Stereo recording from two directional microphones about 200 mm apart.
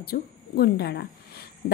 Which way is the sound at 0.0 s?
50° left (ahead or behind).